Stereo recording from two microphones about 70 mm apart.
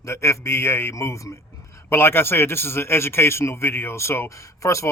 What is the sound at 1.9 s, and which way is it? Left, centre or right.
A man's voice, left.